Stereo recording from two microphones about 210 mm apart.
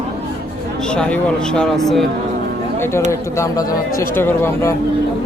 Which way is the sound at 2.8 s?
10° left (ahead or behind).